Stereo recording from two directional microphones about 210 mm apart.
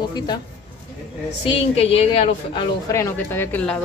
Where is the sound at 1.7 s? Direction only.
25° left (ahead or behind).